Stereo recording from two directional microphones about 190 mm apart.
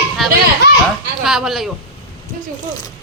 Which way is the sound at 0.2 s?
Centre (ahead or behind).